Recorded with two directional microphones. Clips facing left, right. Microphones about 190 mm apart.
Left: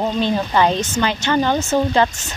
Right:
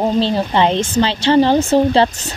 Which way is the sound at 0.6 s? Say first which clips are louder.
Right 3 dB; 20° right (ahead or behind).